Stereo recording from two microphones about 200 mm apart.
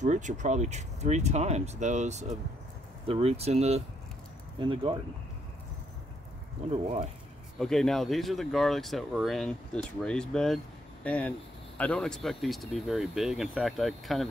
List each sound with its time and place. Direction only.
0.0 s speech: 35° right (ahead or behind)
6.7 s speech: 30° right (ahead or behind)
7.5 s speech: centre (ahead or behind)